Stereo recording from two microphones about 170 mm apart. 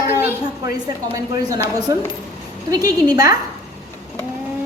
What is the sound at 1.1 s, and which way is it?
Speech, 20° right (ahead or behind).